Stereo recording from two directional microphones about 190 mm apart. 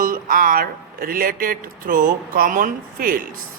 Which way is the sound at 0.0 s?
45° right (ahead or behind).